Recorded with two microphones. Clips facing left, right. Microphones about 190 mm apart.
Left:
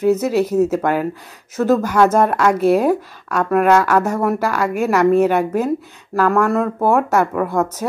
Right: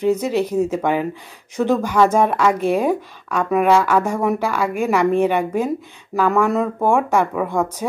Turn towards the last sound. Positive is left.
turn(degrees=5)  # may be behind; listen again after turning